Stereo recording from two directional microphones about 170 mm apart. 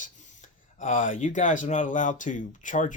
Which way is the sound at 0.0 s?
50° left (ahead or behind).